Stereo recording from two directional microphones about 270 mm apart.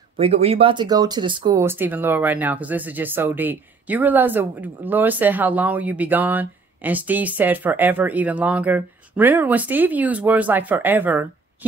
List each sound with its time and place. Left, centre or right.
0.2 s speech: right